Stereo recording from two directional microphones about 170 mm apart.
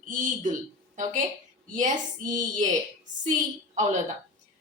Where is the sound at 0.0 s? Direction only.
50° right (ahead or behind).